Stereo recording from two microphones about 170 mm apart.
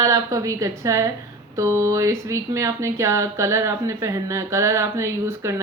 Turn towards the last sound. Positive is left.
turn(degrees=-15)  # may be behind; listen again after turning